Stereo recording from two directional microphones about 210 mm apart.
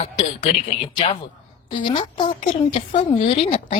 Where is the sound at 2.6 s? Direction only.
35° left (ahead or behind).